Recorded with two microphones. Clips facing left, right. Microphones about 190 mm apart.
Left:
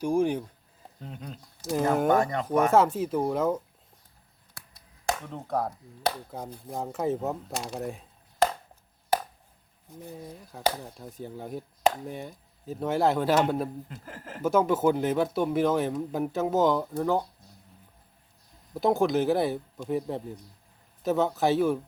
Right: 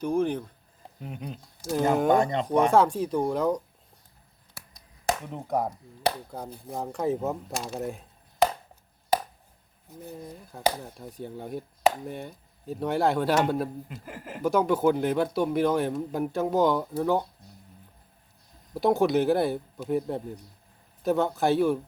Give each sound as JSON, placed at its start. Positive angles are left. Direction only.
{"t": 0.0, "sound": "speech", "side_deg": 10}
{"t": 0.9, "sound": "speech", "side_deg": -15}
{"t": 1.9, "sound": "speech", "side_deg": 0}
{"t": 2.1, "sound": "speech", "side_deg": -20}
{"t": 2.7, "sound": "speech", "side_deg": 5}
{"t": 5.2, "sound": "speech", "side_deg": -15}
{"t": 6.3, "sound": "speech", "side_deg": 0}
{"t": 10.0, "sound": "speech", "side_deg": 0}
{"t": 13.8, "sound": "speech", "side_deg": -10}
{"t": 14.4, "sound": "speech", "side_deg": 0}
{"t": 18.7, "sound": "speech", "side_deg": 0}